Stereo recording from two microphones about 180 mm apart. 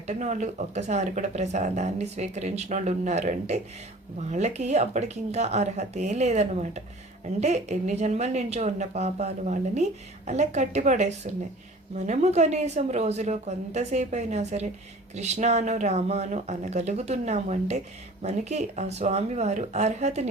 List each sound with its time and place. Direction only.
0.1 s a woman's voice: 40° right (ahead or behind)